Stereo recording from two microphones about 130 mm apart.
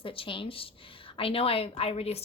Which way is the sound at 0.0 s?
45° left (ahead or behind).